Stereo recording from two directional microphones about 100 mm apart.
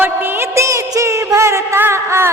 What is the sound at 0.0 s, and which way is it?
Music, 20° right (ahead or behind).